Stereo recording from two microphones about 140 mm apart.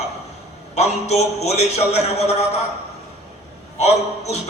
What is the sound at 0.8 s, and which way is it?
A man's voice, 55° left (ahead or behind).